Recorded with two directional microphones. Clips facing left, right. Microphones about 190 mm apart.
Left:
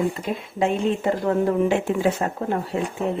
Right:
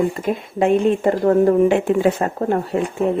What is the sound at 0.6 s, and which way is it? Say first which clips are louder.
Speech: right 6 dB; 50° right (ahead or behind).